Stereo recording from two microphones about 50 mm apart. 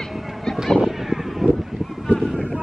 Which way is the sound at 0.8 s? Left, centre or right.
Centre.